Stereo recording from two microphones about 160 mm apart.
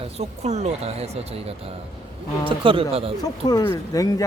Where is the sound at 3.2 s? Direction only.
25° left (ahead or behind).